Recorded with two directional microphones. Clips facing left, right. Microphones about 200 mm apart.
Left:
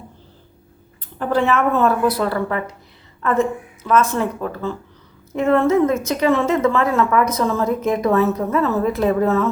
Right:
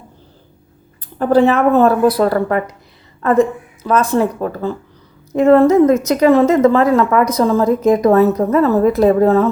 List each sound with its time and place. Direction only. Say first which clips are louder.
1.2 s a woman's voice: right 6 dB; 35° right (ahead or behind)